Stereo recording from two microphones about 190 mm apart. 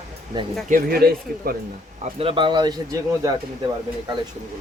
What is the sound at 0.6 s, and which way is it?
Speech, 50° right (ahead or behind).